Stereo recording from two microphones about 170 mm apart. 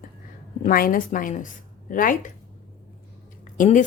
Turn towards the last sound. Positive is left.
turn(degrees=50)  # may be behind; listen again after turning